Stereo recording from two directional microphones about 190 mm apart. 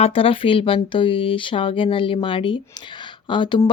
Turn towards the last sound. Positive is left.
turn(degrees=25)  # may be behind; listen again after turning